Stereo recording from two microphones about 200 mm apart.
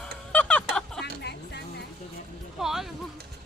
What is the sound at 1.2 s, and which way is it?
Music, 55° left (ahead or behind).